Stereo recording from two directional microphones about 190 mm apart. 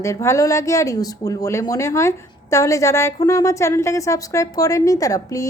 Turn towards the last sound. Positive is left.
turn(degrees=15)  # may be behind; listen again after turning